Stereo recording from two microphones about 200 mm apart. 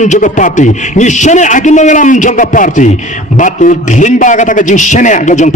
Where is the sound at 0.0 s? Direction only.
40° left (ahead or behind).